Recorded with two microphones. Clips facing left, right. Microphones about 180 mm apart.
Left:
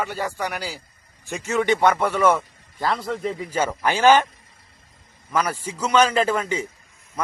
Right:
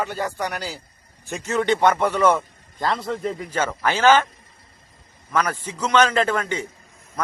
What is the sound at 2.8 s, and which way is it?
A man's voice, centre (ahead or behind).